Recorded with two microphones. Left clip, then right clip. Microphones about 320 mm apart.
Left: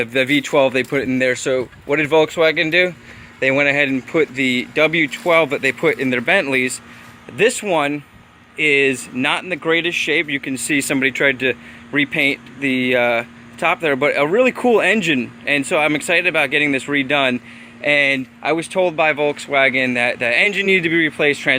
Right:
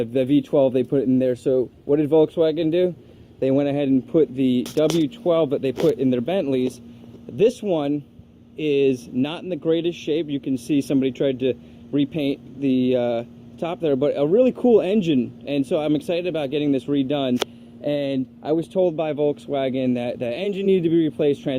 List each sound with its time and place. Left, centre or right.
0.0 s speech: left